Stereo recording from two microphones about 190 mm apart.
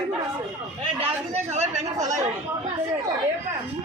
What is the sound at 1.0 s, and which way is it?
Speech, 35° right (ahead or behind).